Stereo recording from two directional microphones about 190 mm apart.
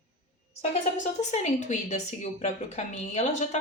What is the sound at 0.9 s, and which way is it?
A woman's voice, 40° left (ahead or behind).